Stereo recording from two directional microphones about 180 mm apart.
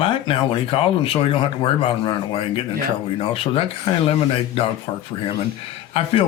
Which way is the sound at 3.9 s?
30° left (ahead or behind).